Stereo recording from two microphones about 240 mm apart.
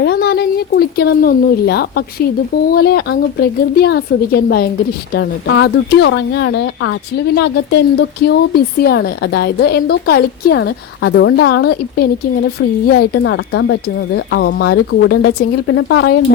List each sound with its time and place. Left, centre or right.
0.0 s a sound: left
2.7 s speech: left
13.2 s speech: left